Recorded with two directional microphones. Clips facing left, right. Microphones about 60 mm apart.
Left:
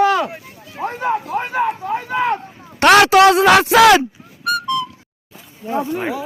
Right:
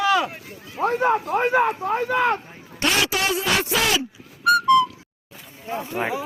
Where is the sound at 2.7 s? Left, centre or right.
Left.